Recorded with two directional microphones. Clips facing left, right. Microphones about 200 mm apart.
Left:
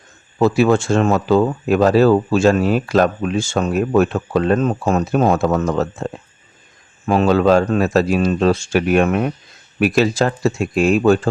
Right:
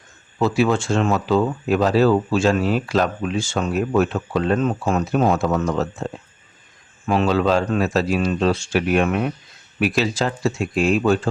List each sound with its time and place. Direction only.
0.3 s speech: 50° left (ahead or behind)
7.1 s speech: 45° left (ahead or behind)